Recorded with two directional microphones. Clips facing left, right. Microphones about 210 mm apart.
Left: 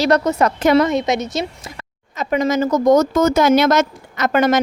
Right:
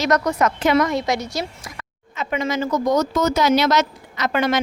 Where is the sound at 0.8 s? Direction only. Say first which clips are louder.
Left 4 dB; 20° left (ahead or behind).